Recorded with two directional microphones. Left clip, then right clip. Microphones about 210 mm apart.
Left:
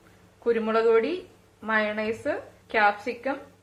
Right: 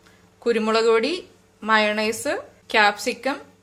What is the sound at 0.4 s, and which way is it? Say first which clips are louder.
A woman's voice: right 3 dB; 55° right (ahead or behind).